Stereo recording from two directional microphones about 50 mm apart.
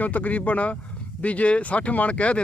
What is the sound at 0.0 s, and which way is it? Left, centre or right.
Speech, left.